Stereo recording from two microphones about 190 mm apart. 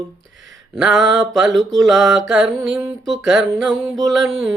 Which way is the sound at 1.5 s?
Centre (ahead or behind).